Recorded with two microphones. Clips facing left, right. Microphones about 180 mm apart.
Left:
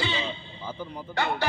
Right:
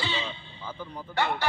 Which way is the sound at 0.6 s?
10° left (ahead or behind).